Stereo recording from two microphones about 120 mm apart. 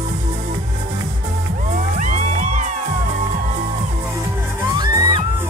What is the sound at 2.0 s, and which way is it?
Music, 90° right.